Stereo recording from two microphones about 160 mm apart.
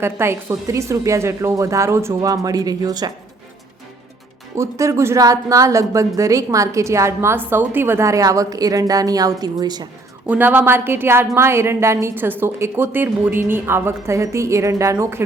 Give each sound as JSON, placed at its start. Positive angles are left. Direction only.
{"t": 0.0, "sound": "speech", "side_deg": -15}
{"t": 4.5, "sound": "speech", "side_deg": -20}
{"t": 10.2, "sound": "a woman's voice", "side_deg": -10}